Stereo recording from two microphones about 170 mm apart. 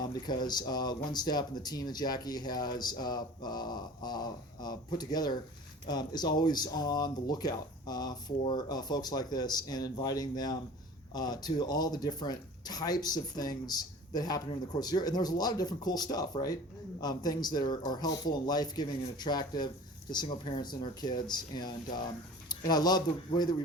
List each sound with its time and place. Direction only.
0.0 s speech: 25° left (ahead or behind)